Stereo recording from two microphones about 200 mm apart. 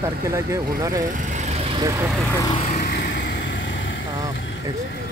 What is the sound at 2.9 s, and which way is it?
Vehicle, 60° left (ahead or behind).